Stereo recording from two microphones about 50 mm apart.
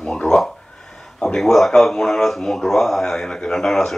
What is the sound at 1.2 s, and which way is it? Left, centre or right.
Speech, centre.